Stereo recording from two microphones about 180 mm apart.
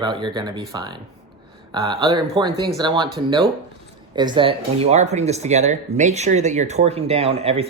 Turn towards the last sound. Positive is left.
turn(degrees=-35)  # may be behind; listen again after turning